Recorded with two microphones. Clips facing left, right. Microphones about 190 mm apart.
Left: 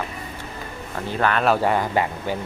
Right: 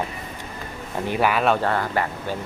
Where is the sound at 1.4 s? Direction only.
5° left (ahead or behind).